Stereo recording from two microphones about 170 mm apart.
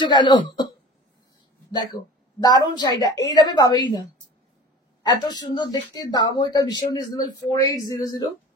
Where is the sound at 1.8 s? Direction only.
25° left (ahead or behind).